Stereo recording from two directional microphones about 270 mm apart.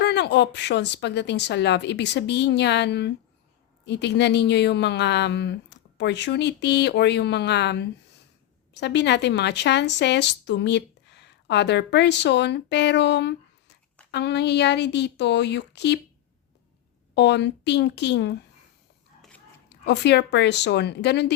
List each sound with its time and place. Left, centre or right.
0.0 s a woman's voice: left
17.2 s a woman's voice: left
19.8 s a woman's voice: left